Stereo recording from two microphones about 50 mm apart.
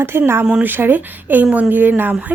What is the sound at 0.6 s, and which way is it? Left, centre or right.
Speech, right.